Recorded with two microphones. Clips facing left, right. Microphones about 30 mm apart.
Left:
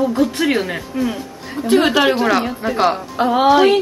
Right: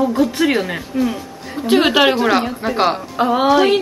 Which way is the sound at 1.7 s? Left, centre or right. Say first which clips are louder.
Right 1 dB; right.